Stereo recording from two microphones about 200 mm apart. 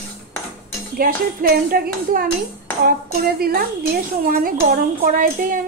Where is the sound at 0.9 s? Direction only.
45° right (ahead or behind).